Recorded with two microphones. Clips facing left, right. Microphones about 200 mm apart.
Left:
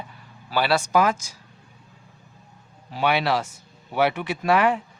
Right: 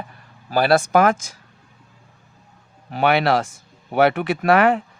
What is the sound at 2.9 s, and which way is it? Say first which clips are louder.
Speech: right 5 dB; 55° right (ahead or behind).